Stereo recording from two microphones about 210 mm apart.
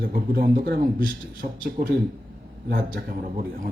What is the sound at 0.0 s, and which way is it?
A man's voice, 45° right (ahead or behind).